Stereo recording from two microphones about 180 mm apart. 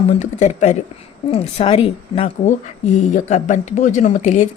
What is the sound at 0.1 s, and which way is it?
A woman's voice, 40° left (ahead or behind).